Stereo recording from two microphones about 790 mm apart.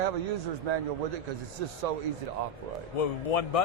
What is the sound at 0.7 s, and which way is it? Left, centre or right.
Speech, right.